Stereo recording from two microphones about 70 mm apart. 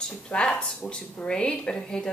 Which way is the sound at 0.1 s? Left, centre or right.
Centre.